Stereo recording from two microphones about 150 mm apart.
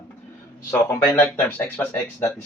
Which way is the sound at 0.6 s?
20° left (ahead or behind).